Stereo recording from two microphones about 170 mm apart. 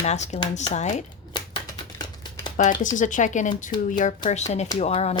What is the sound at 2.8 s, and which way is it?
Speech, 50° left (ahead or behind).